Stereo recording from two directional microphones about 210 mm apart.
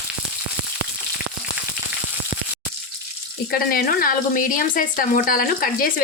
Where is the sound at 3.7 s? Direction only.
45° left (ahead or behind).